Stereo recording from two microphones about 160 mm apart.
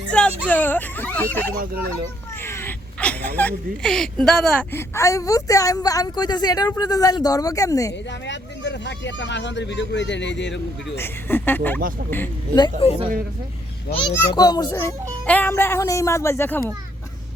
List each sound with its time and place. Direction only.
0.1 s speech: 10° left (ahead or behind)
4.7 s a woman's voice: 15° left (ahead or behind)
8.3 s speech: 90° left
10.9 s a child's voice: 15° left (ahead or behind)
12.5 s a woman's voice: 30° left (ahead or behind)
14.1 s a woman's voice: 25° left (ahead or behind)